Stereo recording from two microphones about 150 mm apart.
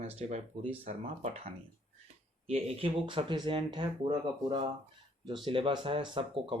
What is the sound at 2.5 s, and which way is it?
Speech, 40° right (ahead or behind).